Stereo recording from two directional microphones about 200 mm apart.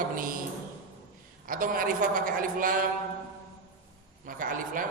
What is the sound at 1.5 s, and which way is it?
A man's voice, 45° right (ahead or behind).